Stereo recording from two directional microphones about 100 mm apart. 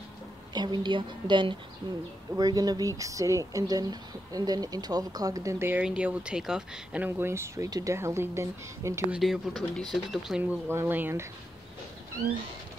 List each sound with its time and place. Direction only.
0.6 s a woman's voice: 50° right (ahead or behind)
2.3 s speech: 40° right (ahead or behind)
5.7 s speech: 10° right (ahead or behind)
7.1 s speech: 25° right (ahead or behind)
9.1 s speech: 5° right (ahead or behind)
10.4 s speech: 20° right (ahead or behind)